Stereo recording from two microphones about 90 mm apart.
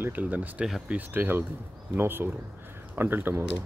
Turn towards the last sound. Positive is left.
turn(degrees=-25)  # may be behind; listen again after turning